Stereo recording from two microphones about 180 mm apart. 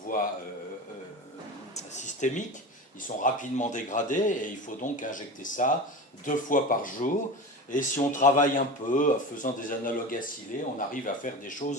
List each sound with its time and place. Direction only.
0.1 s speech: 50° left (ahead or behind)
1.7 s speech: 45° left (ahead or behind)